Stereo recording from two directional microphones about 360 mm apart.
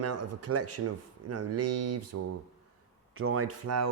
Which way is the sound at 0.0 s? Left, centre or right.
Right.